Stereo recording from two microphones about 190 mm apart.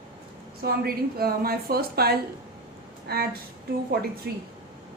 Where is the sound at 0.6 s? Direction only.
55° right (ahead or behind).